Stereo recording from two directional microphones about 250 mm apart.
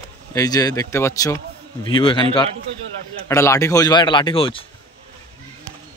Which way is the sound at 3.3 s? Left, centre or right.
Centre.